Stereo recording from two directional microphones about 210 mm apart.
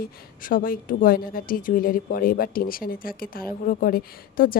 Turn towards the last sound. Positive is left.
turn(degrees=45)  # may be behind; listen again after turning